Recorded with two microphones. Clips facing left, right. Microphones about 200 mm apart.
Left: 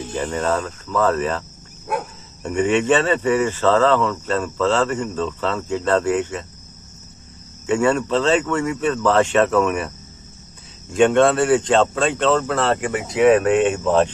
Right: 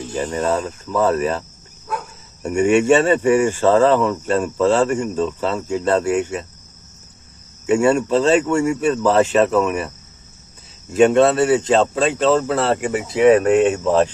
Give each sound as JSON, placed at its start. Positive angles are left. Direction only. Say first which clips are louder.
{"t": 0.1, "sound": "speech", "louder": "right 2 dB", "side_deg": -15}
{"t": 2.4, "sound": "speech", "louder": "right 3 dB", "side_deg": -10}
{"t": 7.6, "sound": "speech", "louder": "right 3 dB", "side_deg": -10}